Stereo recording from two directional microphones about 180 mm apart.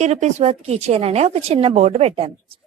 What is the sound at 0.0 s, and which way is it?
A woman's voice, 40° right (ahead or behind).